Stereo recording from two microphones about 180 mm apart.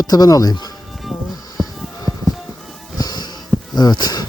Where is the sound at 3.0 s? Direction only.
25° left (ahead or behind).